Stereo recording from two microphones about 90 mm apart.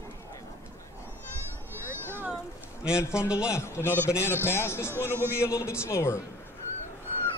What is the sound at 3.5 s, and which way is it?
A man's voice, 30° left (ahead or behind).